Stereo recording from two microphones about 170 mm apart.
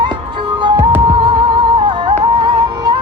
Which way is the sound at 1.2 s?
30° right (ahead or behind).